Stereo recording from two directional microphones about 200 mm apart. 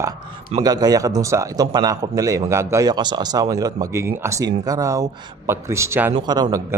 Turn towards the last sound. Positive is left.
turn(degrees=-20)  # may be behind; listen again after turning